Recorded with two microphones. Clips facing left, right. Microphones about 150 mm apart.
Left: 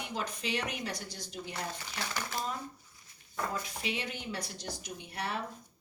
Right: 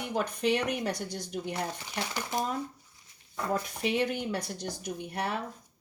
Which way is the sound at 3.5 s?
55° right (ahead or behind).